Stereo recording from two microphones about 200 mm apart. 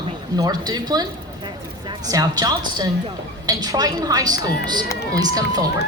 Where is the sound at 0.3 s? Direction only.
20° right (ahead or behind).